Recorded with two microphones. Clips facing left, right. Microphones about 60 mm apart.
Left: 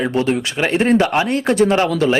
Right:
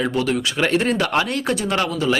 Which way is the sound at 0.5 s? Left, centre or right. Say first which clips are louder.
Left 5 dB; left.